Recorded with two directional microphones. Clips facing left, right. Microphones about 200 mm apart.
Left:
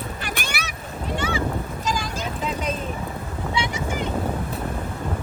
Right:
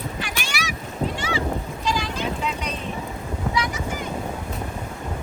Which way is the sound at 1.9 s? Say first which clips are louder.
Right 3 dB; 45° left (ahead or behind).